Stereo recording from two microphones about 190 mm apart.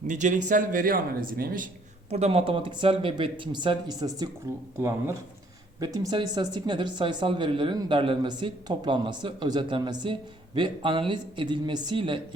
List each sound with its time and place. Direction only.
0.1 s speech: 40° right (ahead or behind)
2.0 s speech: 35° right (ahead or behind)